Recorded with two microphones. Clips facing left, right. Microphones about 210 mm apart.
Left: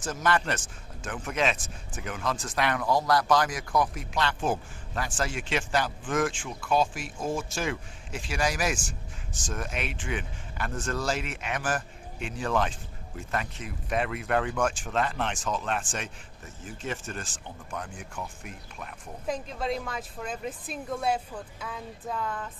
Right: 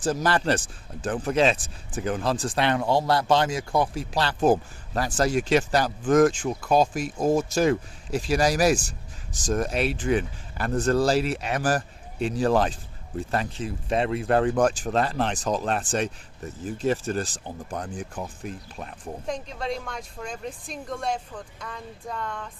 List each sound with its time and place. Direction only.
0.0 s speech: 35° right (ahead or behind)
19.2 s speech: 5° left (ahead or behind)